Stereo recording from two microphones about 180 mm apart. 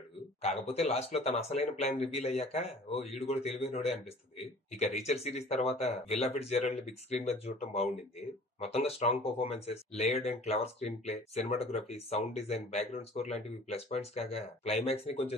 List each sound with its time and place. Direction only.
0.4 s speech: 35° left (ahead or behind)